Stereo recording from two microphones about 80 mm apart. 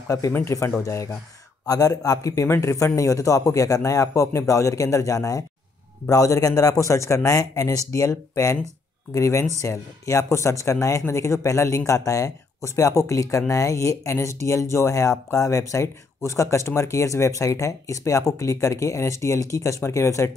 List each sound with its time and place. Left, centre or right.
0.3 s a man's voice: left